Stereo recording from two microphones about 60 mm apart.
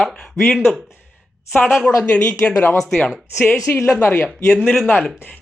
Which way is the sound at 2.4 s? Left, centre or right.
Left.